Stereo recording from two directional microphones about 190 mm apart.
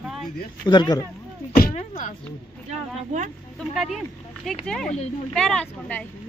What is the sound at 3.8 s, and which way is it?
Speech, centre (ahead or behind).